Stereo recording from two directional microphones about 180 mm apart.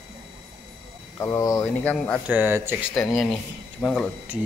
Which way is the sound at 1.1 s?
20° left (ahead or behind).